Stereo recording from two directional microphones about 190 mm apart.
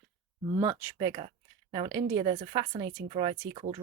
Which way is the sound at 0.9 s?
20° right (ahead or behind).